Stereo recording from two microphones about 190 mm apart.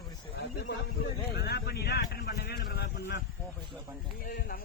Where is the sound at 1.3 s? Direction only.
55° left (ahead or behind).